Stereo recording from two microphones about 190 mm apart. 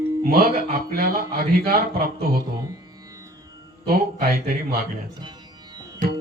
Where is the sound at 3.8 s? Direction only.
55° right (ahead or behind).